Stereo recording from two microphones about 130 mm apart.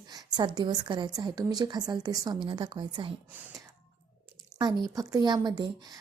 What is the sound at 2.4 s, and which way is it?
Speech, 40° right (ahead or behind).